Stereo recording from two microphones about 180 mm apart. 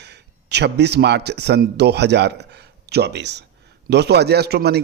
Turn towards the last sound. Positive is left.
turn(degrees=-65)  # may be behind; listen again after turning